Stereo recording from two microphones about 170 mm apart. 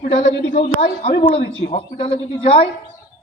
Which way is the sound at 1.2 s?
35° left (ahead or behind).